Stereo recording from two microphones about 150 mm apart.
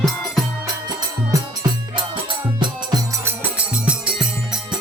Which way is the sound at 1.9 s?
30° right (ahead or behind).